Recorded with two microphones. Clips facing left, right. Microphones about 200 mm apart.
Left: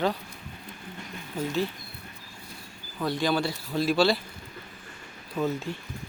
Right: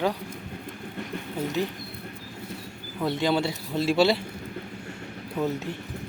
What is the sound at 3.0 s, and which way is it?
A man's voice, 25° right (ahead or behind).